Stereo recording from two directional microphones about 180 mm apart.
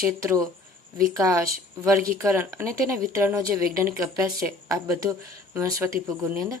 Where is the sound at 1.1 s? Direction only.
20° right (ahead or behind).